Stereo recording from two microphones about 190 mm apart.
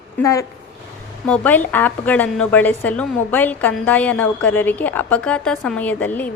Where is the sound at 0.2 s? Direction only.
15° left (ahead or behind).